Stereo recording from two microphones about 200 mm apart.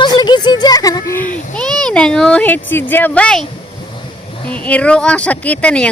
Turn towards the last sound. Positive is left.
turn(degrees=5)  # may be behind; listen again after turning